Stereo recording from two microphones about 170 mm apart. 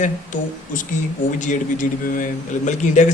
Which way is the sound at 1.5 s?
50° left (ahead or behind).